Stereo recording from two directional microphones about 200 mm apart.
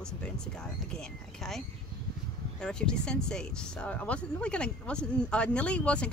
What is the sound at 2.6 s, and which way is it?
Speech, 5° left (ahead or behind).